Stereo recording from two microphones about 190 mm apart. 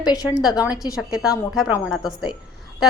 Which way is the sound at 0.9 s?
5° right (ahead or behind).